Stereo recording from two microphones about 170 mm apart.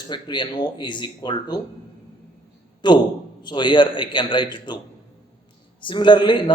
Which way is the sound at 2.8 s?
25° left (ahead or behind).